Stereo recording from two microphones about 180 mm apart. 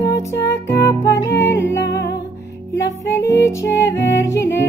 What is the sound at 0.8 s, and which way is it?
Music, 15° left (ahead or behind).